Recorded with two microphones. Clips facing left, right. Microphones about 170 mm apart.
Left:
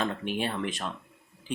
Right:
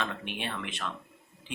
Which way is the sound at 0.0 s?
40° left (ahead or behind).